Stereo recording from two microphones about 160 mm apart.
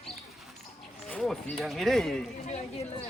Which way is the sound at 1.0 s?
5° left (ahead or behind).